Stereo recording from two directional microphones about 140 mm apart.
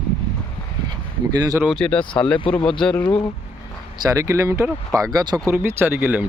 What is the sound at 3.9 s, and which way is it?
Speech, 25° right (ahead or behind).